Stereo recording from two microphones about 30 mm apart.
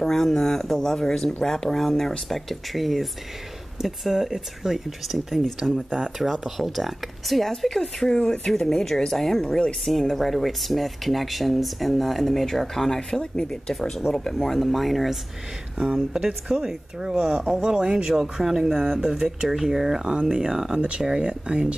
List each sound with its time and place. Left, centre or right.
0.0 s speech: centre
5.9 s speech: right
6.5 s speech: centre
7.6 s speech: centre
13.7 s speech: centre
15.8 s speech: right
16.5 s speech: centre
17.2 s speech: right
18.2 s speech: centre
19.2 s speech: centre
20.1 s speech: right
21.2 s speech: right